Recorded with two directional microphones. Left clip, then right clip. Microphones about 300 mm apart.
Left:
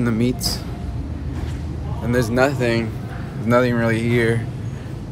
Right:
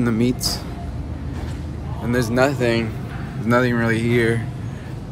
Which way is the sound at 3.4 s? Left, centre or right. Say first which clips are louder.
Left 1 dB; centre.